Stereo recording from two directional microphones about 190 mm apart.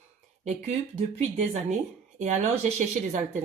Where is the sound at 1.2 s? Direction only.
35° right (ahead or behind).